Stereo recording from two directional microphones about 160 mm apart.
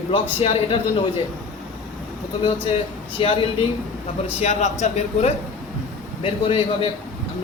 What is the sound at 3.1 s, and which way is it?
A woman's voice, 35° left (ahead or behind).